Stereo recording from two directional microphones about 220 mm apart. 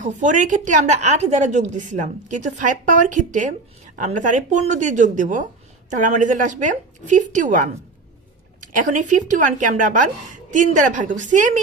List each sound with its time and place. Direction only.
0.0 s a woman's voice: 35° right (ahead or behind)
8.6 s a woman's voice: 35° right (ahead or behind)